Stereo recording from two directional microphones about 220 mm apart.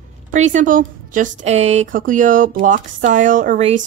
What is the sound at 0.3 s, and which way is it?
A woman's voice, 35° right (ahead or behind).